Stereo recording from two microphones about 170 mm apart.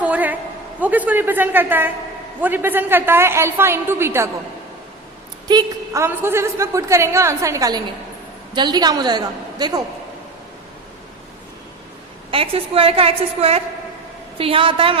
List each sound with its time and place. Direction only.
0.0 s a sound: 10° right (ahead or behind)
0.8 s a woman's voice: 10° right (ahead or behind)
5.5 s a woman's voice: 20° right (ahead or behind)
12.3 s a woman's voice: 35° right (ahead or behind)